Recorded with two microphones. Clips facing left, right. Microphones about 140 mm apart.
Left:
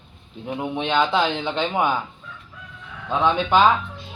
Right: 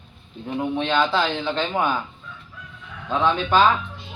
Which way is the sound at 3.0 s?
20° left (ahead or behind).